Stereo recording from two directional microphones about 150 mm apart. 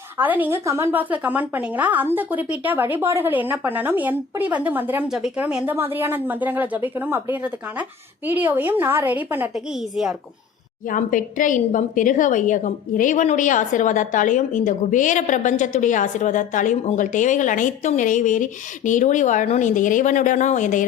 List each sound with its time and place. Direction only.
0.2 s a woman's voice: 10° right (ahead or behind)
10.8 s a woman's voice: 65° left (ahead or behind)